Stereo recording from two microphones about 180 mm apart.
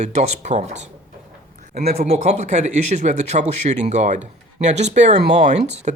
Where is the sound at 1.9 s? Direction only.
35° right (ahead or behind).